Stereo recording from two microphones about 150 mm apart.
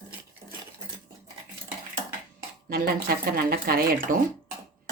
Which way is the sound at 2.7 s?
90° right.